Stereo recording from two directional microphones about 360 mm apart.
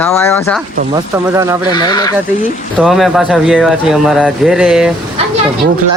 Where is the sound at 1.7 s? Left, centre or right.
Centre.